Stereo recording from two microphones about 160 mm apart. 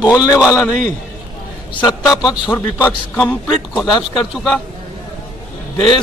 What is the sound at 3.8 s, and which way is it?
Speech, 30° left (ahead or behind).